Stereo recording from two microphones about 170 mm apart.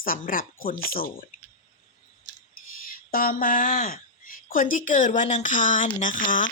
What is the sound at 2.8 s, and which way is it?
Speech, 60° left (ahead or behind).